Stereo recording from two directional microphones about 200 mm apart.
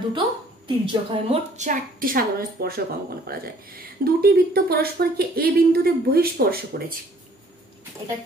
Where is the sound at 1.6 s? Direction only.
45° right (ahead or behind).